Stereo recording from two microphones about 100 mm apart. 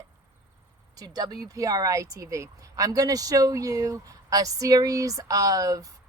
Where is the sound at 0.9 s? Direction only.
40° right (ahead or behind).